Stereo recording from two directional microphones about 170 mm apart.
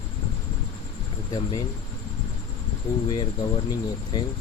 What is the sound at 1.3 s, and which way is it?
Speech, 20° left (ahead or behind).